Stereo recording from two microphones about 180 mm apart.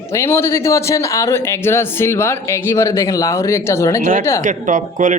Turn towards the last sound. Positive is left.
turn(degrees=-45)  # may be behind; listen again after turning